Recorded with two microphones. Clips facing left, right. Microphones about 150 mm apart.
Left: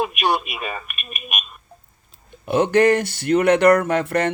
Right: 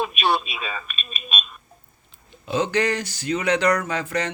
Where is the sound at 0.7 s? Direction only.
15° left (ahead or behind).